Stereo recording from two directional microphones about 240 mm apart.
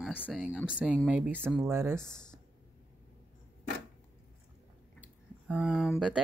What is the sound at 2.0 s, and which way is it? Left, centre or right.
Speech, centre.